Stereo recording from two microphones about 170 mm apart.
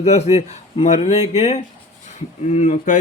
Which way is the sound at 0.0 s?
40° left (ahead or behind).